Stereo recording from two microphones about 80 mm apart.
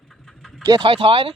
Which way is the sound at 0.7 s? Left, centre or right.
Right.